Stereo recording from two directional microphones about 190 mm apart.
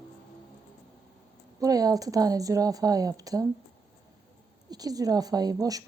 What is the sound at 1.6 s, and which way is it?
A woman's voice, 20° right (ahead or behind).